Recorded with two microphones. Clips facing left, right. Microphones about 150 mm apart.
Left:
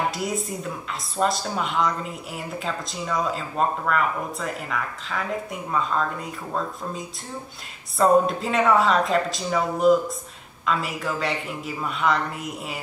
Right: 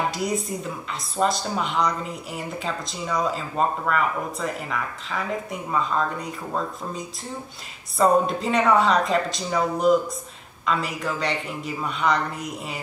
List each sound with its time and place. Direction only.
0.1 s speech: centre (ahead or behind)